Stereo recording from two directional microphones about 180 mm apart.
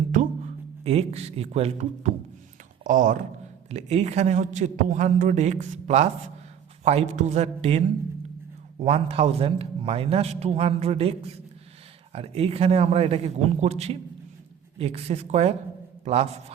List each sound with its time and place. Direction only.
0.9 s a man's voice: 35° right (ahead or behind)
2.8 s a man's voice: 45° right (ahead or behind)
12.1 s a man's voice: 35° right (ahead or behind)